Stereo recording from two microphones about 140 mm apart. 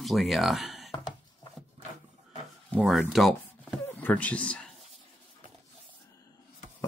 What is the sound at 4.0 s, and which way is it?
Speech, 10° left (ahead or behind).